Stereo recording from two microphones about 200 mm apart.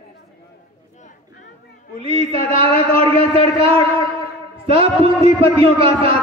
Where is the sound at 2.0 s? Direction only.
30° right (ahead or behind).